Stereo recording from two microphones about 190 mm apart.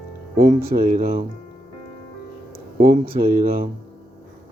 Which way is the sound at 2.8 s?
50° right (ahead or behind).